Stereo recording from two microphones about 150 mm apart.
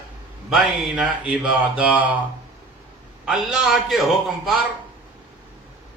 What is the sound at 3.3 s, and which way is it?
Speech, centre (ahead or behind).